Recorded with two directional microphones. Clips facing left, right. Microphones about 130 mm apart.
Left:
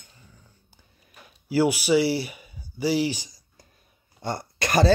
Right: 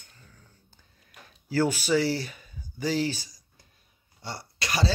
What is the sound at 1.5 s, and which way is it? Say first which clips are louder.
Speech: left 4 dB; 10° left (ahead or behind).